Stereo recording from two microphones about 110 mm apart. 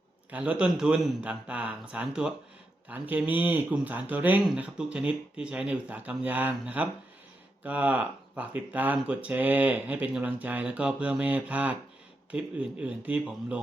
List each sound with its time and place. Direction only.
0.3 s speech: 15° right (ahead or behind)